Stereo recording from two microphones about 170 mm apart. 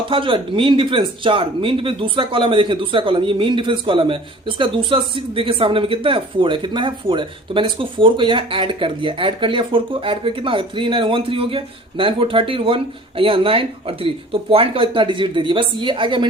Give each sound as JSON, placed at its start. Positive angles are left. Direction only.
{"t": 0.1, "sound": "a woman's voice", "side_deg": -30}